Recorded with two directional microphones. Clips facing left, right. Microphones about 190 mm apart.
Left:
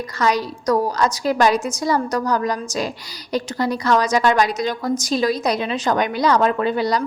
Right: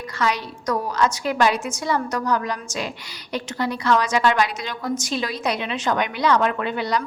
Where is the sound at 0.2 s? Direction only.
40° left (ahead or behind).